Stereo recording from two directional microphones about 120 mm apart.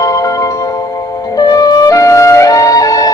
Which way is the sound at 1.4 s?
35° left (ahead or behind).